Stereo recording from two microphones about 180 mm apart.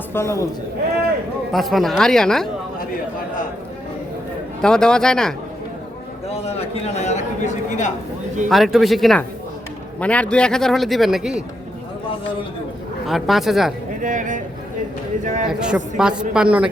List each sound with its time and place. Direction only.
0.1 s speech: 15° left (ahead or behind)
1.5 s a man's voice: centre (ahead or behind)
2.7 s chatter: 55° left (ahead or behind)
4.6 s a man's voice: 5° left (ahead or behind)
6.2 s a man's voice: 35° left (ahead or behind)
8.4 s a man's voice: centre (ahead or behind)
13.1 s a man's voice: centre (ahead or behind)
14.0 s a man's voice: 45° right (ahead or behind)
15.4 s a man's voice: 5° right (ahead or behind)